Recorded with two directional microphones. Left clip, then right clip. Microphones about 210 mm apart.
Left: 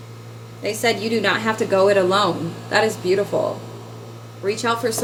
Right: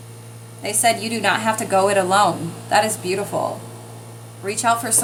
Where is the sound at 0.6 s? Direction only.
25° right (ahead or behind).